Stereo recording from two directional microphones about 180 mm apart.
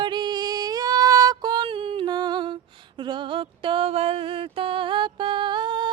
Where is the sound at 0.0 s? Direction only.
25° right (ahead or behind).